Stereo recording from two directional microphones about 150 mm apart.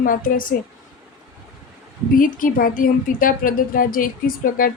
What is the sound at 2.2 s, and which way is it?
A woman's voice, 65° left (ahead or behind).